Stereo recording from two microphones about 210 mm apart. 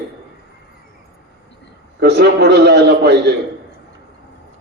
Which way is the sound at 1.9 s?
55° right (ahead or behind).